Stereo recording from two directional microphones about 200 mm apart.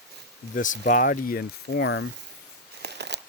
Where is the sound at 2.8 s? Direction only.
55° right (ahead or behind).